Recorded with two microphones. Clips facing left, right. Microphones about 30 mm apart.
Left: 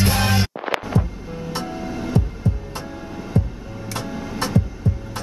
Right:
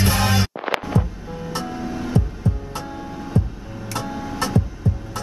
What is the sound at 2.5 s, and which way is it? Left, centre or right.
Music, left.